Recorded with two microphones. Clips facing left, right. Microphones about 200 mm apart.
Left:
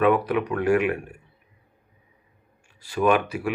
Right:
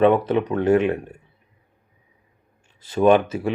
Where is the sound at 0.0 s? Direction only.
25° right (ahead or behind).